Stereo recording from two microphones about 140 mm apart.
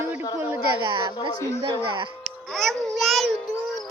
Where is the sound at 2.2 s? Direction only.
5° left (ahead or behind).